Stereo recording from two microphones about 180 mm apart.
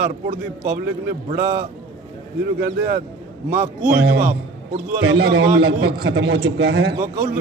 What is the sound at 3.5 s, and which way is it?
A man's voice, 50° right (ahead or behind).